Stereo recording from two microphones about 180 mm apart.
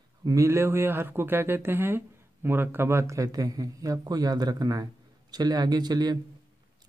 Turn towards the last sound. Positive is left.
turn(degrees=-20)  # may be behind; listen again after turning